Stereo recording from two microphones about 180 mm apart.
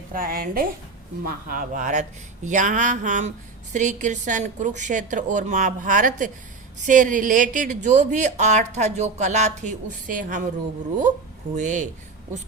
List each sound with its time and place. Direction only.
0.1 s speech: 55° right (ahead or behind)
11.5 s speech: 45° right (ahead or behind)